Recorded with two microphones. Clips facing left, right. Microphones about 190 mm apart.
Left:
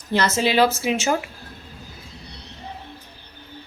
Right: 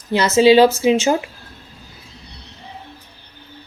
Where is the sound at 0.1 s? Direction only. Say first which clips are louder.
Right 9 dB; 15° right (ahead or behind).